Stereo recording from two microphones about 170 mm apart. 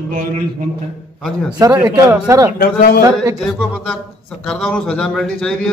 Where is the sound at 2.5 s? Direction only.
60° left (ahead or behind).